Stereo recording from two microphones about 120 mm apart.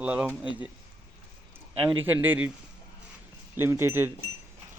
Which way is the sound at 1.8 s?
45° right (ahead or behind).